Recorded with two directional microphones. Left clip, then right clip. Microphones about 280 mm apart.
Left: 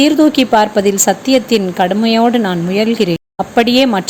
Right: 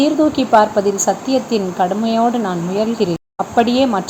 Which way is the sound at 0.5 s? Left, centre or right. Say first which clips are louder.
Left 1 dB; left.